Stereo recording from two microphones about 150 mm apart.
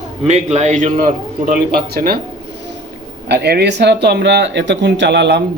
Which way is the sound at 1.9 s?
90° right.